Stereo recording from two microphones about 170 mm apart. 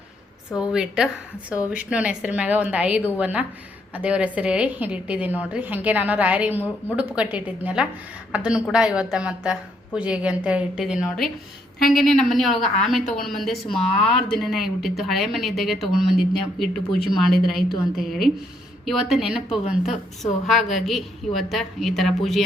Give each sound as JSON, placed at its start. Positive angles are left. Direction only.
{"t": 0.5, "sound": "a woman's voice", "side_deg": -5}
{"t": 11.8, "sound": "a woman's voice", "side_deg": 55}
{"t": 12.2, "sound": "speech", "side_deg": 0}
{"t": 18.9, "sound": "speech", "side_deg": 0}